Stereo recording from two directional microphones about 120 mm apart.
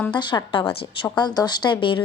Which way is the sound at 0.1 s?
40° left (ahead or behind).